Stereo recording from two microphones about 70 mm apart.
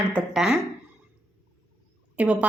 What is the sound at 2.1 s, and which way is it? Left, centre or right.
Speech, centre.